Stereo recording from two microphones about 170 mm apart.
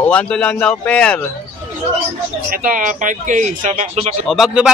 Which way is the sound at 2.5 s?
55° right (ahead or behind).